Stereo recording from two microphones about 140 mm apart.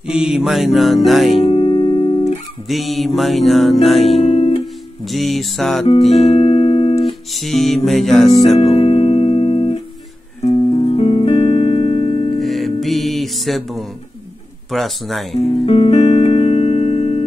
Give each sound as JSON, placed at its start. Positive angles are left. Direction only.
{"t": 0.1, "sound": "music", "side_deg": -5}
{"t": 1.4, "sound": "music", "side_deg": 40}
{"t": 2.7, "sound": "music", "side_deg": 0}
{"t": 4.2, "sound": "guitar", "side_deg": 45}
{"t": 5.0, "sound": "music", "side_deg": 0}
{"t": 6.1, "sound": "music", "side_deg": 50}
{"t": 7.3, "sound": "music", "side_deg": 0}
{"t": 8.5, "sound": "music", "side_deg": 45}
{"t": 12.4, "sound": "music", "side_deg": 0}
{"t": 15.3, "sound": "music", "side_deg": 45}